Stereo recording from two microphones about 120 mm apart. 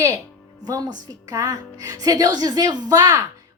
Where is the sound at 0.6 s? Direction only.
30° right (ahead or behind).